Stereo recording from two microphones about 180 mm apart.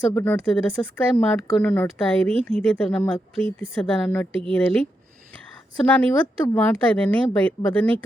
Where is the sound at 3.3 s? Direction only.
30° right (ahead or behind).